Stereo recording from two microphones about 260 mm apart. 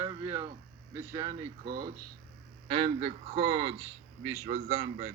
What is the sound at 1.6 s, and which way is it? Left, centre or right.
Speech, right.